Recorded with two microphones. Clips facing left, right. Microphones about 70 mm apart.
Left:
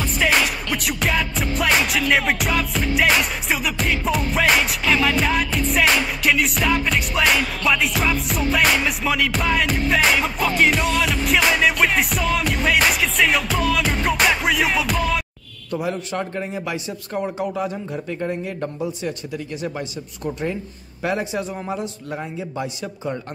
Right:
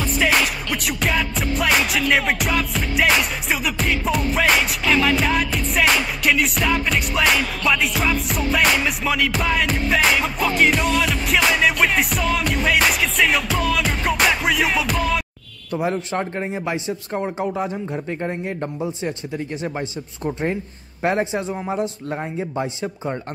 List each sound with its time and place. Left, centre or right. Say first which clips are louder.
0.0 s music: even; centre
15.7 s a man's voice: right 2 dB; right
21.0 s a man's voice: right 3 dB; right